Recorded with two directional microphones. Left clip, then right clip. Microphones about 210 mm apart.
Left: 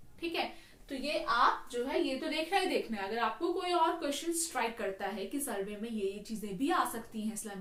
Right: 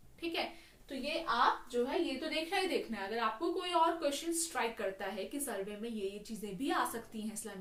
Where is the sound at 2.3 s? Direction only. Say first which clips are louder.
Left 3 dB; 15° right (ahead or behind).